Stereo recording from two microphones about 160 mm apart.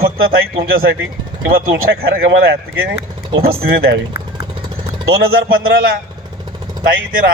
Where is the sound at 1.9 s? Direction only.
70° right (ahead or behind).